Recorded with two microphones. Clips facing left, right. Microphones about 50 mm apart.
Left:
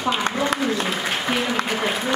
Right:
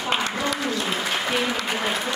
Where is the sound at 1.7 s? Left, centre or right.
Centre.